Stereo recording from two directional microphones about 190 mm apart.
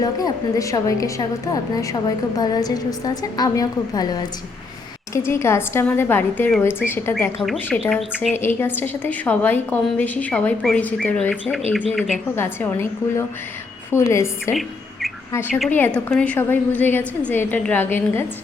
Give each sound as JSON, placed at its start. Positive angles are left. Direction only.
{"t": 0.0, "sound": "a woman's voice", "side_deg": 20}
{"t": 7.4, "sound": "speech", "side_deg": 0}
{"t": 8.4, "sound": "a woman's voice", "side_deg": 10}
{"t": 12.4, "sound": "a woman's voice", "side_deg": 15}
{"t": 15.4, "sound": "a woman's voice", "side_deg": 0}